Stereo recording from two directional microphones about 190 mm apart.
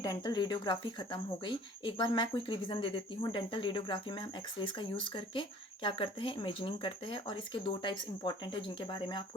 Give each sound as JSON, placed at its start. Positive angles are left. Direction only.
{"t": 0.0, "sound": "speech", "side_deg": 20}